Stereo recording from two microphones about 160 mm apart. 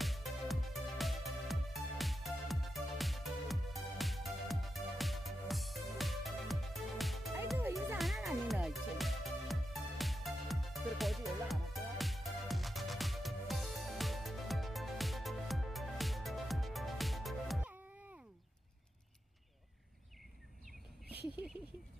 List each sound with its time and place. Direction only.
0.0 s music: centre (ahead or behind)